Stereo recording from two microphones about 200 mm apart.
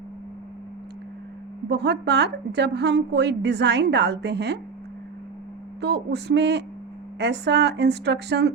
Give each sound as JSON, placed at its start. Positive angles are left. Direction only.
{"t": 1.7, "sound": "a woman's voice", "side_deg": -55}
{"t": 5.8, "sound": "a woman's voice", "side_deg": -55}